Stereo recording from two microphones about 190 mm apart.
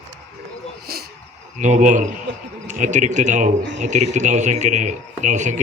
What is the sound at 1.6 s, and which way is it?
A man's voice, 40° right (ahead or behind).